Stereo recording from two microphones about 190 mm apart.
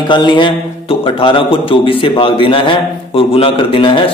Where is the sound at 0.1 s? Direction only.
25° left (ahead or behind).